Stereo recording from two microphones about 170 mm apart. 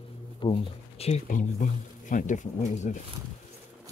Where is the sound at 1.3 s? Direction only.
50° left (ahead or behind).